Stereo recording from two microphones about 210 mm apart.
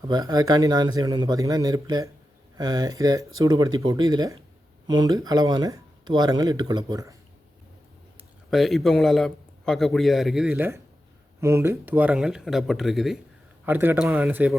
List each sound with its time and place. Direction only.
0.1 s speech: 20° right (ahead or behind)
8.4 s a man's voice: centre (ahead or behind)